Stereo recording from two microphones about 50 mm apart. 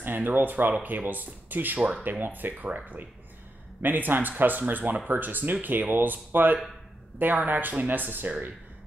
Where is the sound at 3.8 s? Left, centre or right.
Right.